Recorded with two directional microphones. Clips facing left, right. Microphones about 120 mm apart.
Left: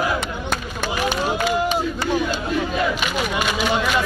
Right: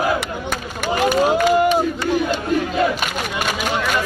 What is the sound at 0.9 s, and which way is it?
Run, 40° right (ahead or behind).